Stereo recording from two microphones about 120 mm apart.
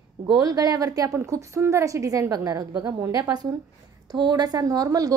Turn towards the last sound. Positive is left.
turn(degrees=-30)  # may be behind; listen again after turning